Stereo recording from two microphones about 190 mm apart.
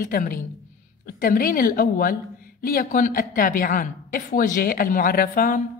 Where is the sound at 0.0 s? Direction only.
50° left (ahead or behind).